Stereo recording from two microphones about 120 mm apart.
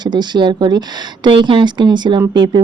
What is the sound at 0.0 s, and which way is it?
A woman's voice, 40° right (ahead or behind).